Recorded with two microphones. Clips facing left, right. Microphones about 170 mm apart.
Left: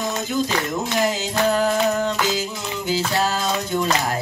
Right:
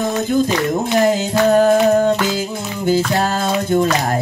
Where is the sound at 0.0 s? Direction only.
55° right (ahead or behind).